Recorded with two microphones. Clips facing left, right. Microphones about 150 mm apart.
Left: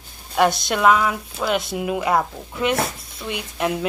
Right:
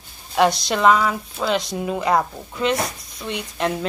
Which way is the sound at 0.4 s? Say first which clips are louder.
Right 1 dB; centre (ahead or behind).